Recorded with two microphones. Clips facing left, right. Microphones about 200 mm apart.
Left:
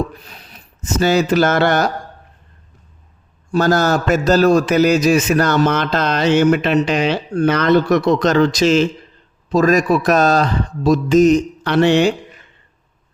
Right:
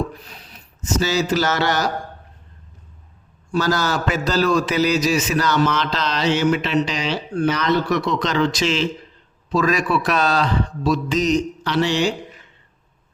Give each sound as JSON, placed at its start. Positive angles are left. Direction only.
{"t": 0.8, "sound": "speech", "side_deg": 55}
{"t": 3.5, "sound": "a man's voice", "side_deg": 50}